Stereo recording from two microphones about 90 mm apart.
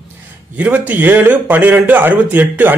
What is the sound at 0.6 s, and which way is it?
A man's voice, 20° right (ahead or behind).